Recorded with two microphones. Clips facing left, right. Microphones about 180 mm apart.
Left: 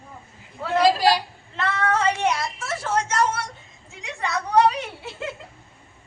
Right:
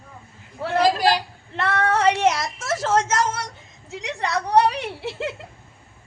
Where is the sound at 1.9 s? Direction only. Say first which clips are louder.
Right 4 dB; 70° right (ahead or behind); by 3.4 s 90° right.